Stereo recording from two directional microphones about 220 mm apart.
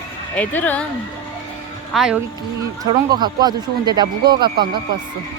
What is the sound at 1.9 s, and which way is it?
Speech, centre (ahead or behind).